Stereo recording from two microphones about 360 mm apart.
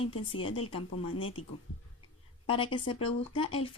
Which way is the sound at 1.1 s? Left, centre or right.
Left.